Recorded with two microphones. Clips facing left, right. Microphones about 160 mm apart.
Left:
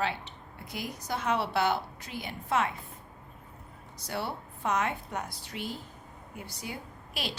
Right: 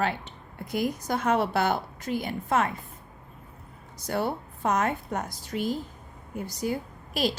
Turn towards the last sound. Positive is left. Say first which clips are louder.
# right 10 dB
turn(degrees=-40)  # may be behind; listen again after turning